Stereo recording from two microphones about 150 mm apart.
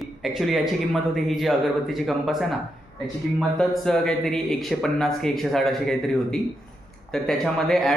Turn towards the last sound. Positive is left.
turn(degrees=5)  # may be behind; listen again after turning